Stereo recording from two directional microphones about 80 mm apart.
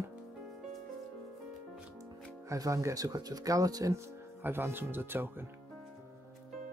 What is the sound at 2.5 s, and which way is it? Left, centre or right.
Speech, right.